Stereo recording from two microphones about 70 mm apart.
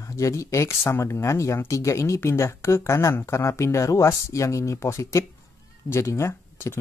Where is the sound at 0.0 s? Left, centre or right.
Left.